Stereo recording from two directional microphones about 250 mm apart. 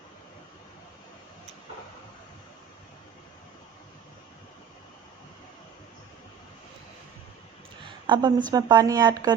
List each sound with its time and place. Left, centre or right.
8.0 s speech: centre